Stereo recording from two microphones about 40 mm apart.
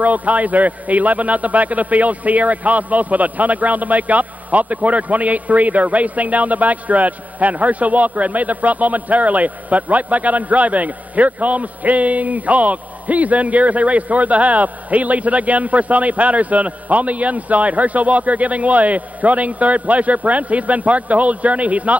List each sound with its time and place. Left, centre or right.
0.0 s a man's voice: right